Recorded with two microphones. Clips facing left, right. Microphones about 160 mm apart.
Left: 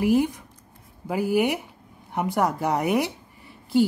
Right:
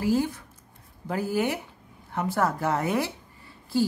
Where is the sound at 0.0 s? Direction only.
20° left (ahead or behind).